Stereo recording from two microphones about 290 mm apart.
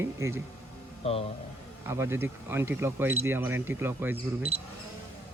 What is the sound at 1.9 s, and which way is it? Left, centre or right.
Speech, centre.